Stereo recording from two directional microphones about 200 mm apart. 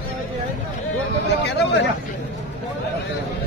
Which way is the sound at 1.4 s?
60° left (ahead or behind).